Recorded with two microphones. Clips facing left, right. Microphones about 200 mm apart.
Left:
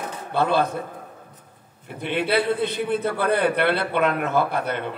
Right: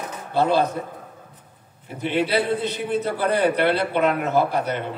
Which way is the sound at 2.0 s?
55° left (ahead or behind).